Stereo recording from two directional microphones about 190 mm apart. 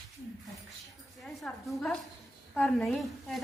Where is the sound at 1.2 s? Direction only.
5° left (ahead or behind).